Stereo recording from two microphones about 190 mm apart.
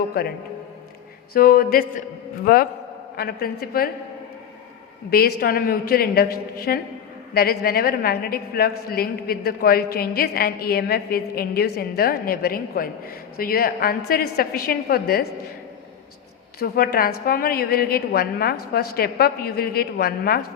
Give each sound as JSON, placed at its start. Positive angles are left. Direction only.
{"t": 0.1, "sound": "a woman's voice", "side_deg": 55}
{"t": 5.1, "sound": "a woman's voice", "side_deg": 55}
{"t": 16.6, "sound": "a woman's voice", "side_deg": 55}